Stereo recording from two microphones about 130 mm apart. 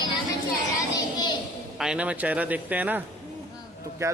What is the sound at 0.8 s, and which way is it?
Child singing, 30° left (ahead or behind).